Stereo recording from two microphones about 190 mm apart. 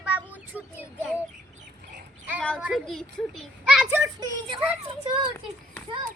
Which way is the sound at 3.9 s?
20° right (ahead or behind).